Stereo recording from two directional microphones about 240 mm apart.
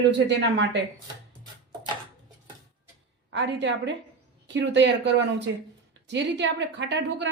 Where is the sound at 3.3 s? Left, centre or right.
Right.